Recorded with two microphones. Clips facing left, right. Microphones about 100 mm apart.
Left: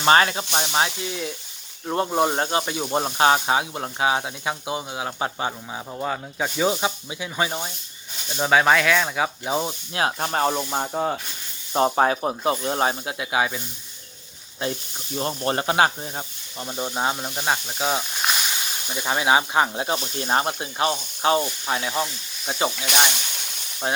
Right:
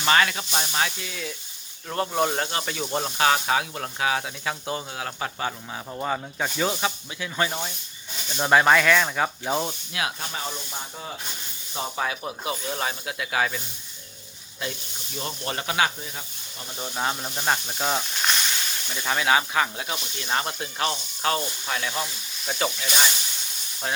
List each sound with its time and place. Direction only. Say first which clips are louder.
0.0 s speech: left 4 dB; 30° left (ahead or behind)
0.5 s speech: left 4 dB; 20° left (ahead or behind)
6.0 s speech: left 1 dB; 5° left (ahead or behind)
6.7 s speech: left 4 dB; 20° left (ahead or behind)
8.4 s speech: even; centre (ahead or behind)
9.9 s speech: left 8 dB; 35° left (ahead or behind)
10.2 s snake: left 11 dB; 55° left (ahead or behind)
11.7 s speech: left 10 dB; 45° left (ahead or behind); by 13.6 s 20° left (ahead or behind)
15.1 s speech: left 7 dB; 40° left (ahead or behind)
16.7 s speech: left 3 dB; 25° left (ahead or behind); by 18.3 s 5° left (ahead or behind)
18.9 s speech: left 2 dB; 20° left (ahead or behind); by 20.6 s 35° left (ahead or behind)
20.6 s speech: left 4 dB; 25° left (ahead or behind)
22.9 s snake: left 3 dB; 60° left (ahead or behind)